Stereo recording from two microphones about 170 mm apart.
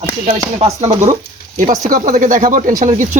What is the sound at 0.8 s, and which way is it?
Speech, 40° right (ahead or behind).